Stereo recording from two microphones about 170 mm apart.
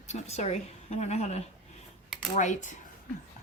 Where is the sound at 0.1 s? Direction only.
40° left (ahead or behind).